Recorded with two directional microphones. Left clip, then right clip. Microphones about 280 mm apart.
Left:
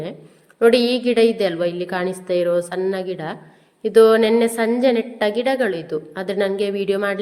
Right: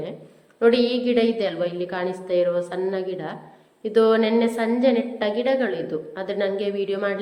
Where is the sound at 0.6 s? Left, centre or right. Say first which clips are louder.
Left 4 dB; left.